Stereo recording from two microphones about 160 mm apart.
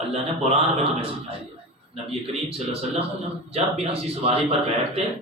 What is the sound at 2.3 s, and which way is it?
A man's voice, 40° right (ahead or behind).